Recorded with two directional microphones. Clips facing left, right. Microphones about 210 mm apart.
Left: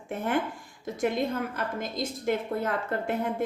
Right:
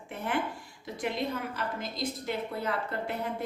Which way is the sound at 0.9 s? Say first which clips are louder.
Left 5 dB; 45° left (ahead or behind).